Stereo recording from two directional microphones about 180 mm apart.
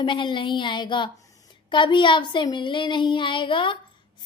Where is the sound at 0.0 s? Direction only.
25° left (ahead or behind).